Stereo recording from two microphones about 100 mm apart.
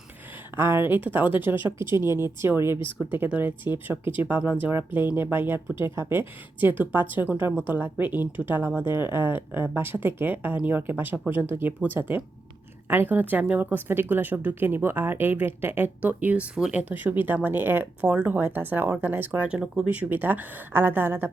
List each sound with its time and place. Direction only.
0.5 s speech: 25° right (ahead or behind)